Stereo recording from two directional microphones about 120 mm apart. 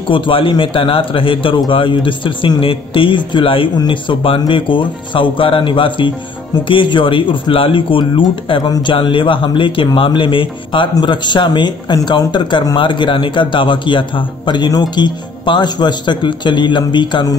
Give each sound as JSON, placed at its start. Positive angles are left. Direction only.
{"t": 0.1, "sound": "a man's voice", "side_deg": 45}